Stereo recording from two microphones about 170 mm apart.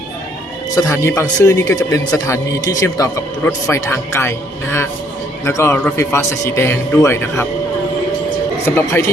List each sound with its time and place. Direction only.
0.8 s a man's voice: 15° left (ahead or behind)
8.6 s a man's voice: 15° left (ahead or behind)